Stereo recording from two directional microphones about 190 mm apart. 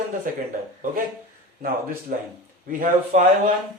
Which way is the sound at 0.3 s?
45° right (ahead or behind).